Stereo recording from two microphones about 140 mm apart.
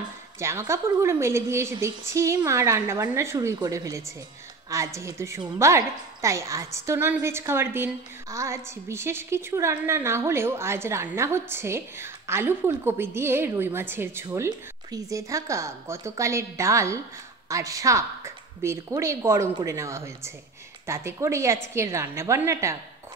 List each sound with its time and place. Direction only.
0.4 s a woman's voice: 20° right (ahead or behind)